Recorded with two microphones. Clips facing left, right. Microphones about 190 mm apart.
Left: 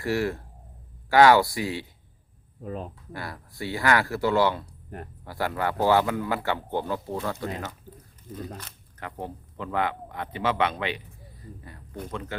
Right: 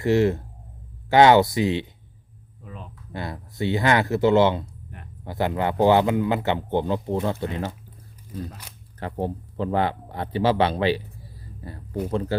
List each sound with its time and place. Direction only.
0.0 s a man's voice: 20° right (ahead or behind)
2.6 s speech: 40° left (ahead or behind)
3.1 s a man's voice: 20° right (ahead or behind)
4.6 s a sound: 40° left (ahead or behind)
5.2 s a man's voice: 20° right (ahead or behind)
9.0 s a man's voice: 30° right (ahead or behind)